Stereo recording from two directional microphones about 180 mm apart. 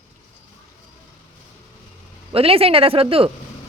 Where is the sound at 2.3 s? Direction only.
30° right (ahead or behind).